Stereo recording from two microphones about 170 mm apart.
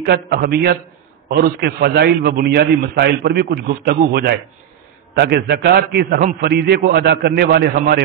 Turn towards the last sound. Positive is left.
turn(degrees=-60)  # may be behind; listen again after turning